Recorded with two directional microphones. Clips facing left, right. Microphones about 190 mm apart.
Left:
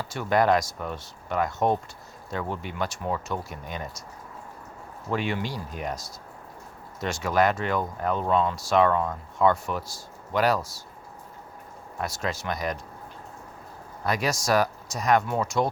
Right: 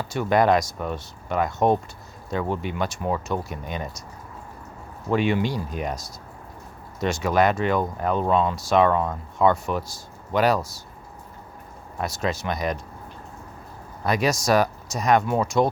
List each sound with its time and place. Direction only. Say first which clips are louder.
0.0 s speech: right 3 dB; 20° right (ahead or behind)
5.1 s speech: right 6 dB; 20° right (ahead or behind)
11.9 s speech: right 4 dB; 20° right (ahead or behind)
14.0 s speech: right 4 dB; 20° right (ahead or behind)